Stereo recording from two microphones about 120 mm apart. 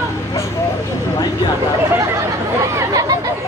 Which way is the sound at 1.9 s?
25° right (ahead or behind).